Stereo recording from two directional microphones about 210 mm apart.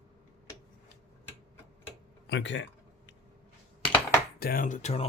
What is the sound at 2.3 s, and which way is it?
Speech, 60° left (ahead or behind).